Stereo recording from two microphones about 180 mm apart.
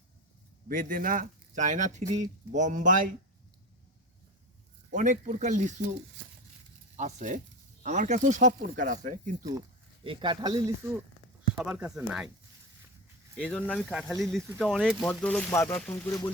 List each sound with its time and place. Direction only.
0.7 s speech: 50° right (ahead or behind)
4.9 s speech: 45° right (ahead or behind)
6.9 s speech: 40° right (ahead or behind)
9.5 s speech: 25° right (ahead or behind)
11.5 s speech: 5° right (ahead or behind)
13.3 s speech: 5° left (ahead or behind)